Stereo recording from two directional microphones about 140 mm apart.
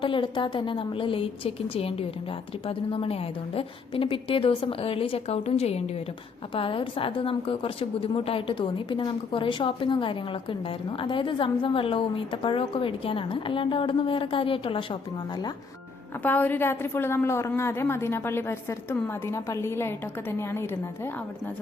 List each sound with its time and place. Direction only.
0.0 s a woman's voice: 35° left (ahead or behind)
16.2 s a woman's voice: 10° left (ahead or behind)